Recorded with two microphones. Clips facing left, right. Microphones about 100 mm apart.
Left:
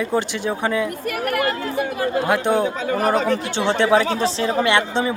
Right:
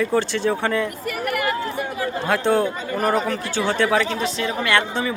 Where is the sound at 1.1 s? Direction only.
55° left (ahead or behind).